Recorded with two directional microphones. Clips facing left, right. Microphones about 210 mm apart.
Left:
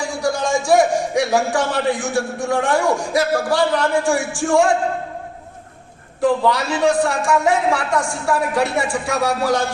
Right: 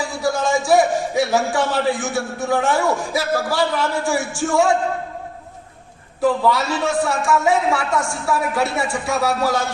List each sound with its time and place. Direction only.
0.0 s a man's voice: centre (ahead or behind)
6.2 s a man's voice: centre (ahead or behind)